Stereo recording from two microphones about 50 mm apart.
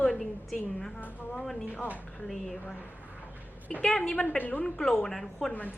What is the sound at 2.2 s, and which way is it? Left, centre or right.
Speech, centre.